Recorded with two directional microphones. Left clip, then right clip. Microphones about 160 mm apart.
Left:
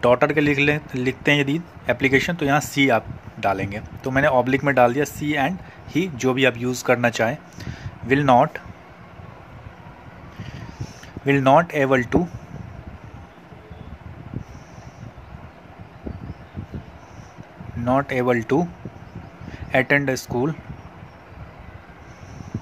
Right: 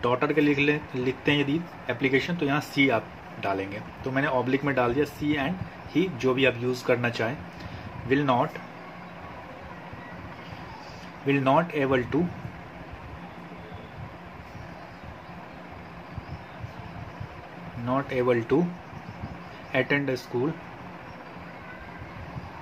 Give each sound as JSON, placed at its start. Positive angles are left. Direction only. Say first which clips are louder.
{"t": 0.0, "sound": "speech", "louder": "left 7 dB", "side_deg": 90}
{"t": 11.2, "sound": "speech", "louder": "left 7 dB", "side_deg": 90}
{"t": 17.8, "sound": "speech", "louder": "left 5 dB", "side_deg": 90}
{"t": 19.7, "sound": "speech", "louder": "left 7 dB", "side_deg": 90}